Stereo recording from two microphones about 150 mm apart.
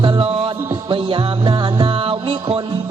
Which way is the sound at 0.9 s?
35° right (ahead or behind).